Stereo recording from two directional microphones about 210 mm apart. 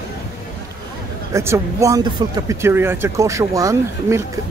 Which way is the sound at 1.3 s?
15° right (ahead or behind).